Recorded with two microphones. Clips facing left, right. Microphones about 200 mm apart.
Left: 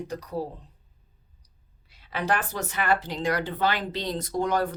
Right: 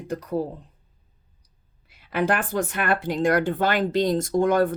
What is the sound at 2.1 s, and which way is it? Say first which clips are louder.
Speech: right 5 dB; 55° right (ahead or behind).